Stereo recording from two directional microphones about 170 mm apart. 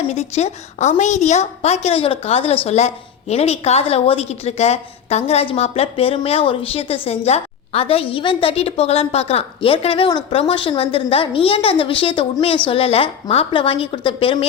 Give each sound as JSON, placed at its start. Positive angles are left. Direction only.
{"t": 0.1, "sound": "a woman's voice", "side_deg": 40}